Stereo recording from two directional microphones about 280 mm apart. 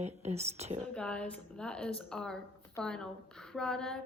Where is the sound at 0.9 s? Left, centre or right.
Centre.